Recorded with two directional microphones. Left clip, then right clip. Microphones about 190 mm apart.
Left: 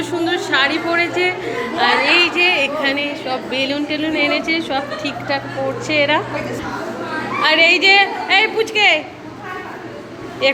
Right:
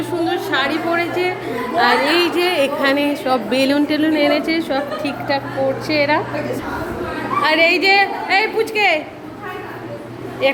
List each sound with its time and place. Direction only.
0.0 s a woman's voice: centre (ahead or behind)
1.7 s a woman's voice: 25° right (ahead or behind)
5.3 s a woman's voice: 5° right (ahead or behind)
7.4 s a woman's voice: 10° right (ahead or behind)
10.4 s a woman's voice: 5° right (ahead or behind)